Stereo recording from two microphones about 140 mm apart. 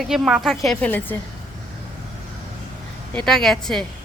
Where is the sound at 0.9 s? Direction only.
15° left (ahead or behind).